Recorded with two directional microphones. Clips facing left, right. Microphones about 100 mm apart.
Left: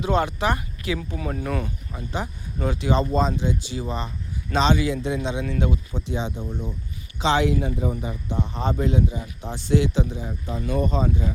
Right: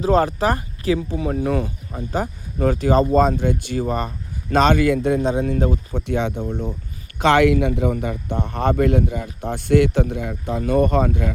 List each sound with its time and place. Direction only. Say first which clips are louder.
0.0 s speech: right 5 dB; 35° right (ahead or behind); by 11.3 s 60° right (ahead or behind)